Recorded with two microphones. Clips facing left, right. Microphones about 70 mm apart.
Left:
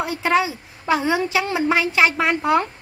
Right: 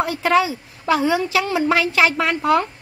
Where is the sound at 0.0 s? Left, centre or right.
Centre.